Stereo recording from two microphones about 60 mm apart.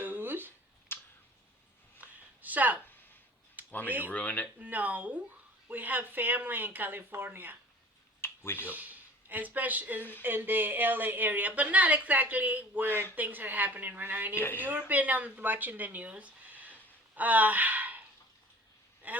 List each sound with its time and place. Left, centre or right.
0.0 s a sound: right
0.9 s tick: left
2.0 s a sound: right
3.8 s a woman's voice: right
4.1 s speech: left
4.6 s a woman's voice: right
8.2 s a sound: left
8.7 s speech: right
10.0 s speech: left
10.2 s a woman's voice: right
14.3 s speech: left
14.8 s speech: right
19.0 s a sound: right